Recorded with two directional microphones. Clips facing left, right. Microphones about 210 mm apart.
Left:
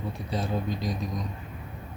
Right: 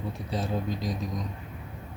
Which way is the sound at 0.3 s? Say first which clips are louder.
Left 1 dB; centre (ahead or behind).